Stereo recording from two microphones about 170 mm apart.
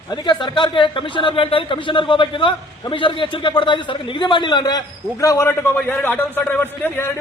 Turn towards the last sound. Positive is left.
turn(degrees=10)  # may be behind; listen again after turning